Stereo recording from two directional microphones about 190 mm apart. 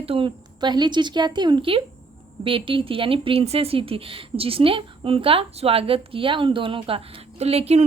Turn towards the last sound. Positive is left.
turn(degrees=-30)  # may be behind; listen again after turning